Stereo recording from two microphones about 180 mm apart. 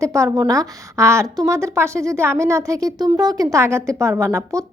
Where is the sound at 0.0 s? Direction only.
15° right (ahead or behind).